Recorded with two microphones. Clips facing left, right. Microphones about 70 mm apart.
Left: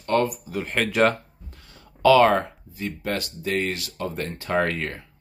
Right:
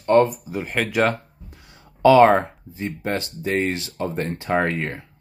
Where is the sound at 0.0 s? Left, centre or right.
Right.